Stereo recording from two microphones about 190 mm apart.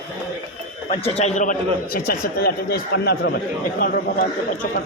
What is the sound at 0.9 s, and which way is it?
A man's voice, 35° left (ahead or behind).